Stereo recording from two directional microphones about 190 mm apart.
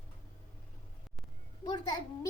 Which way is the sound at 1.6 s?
20° left (ahead or behind).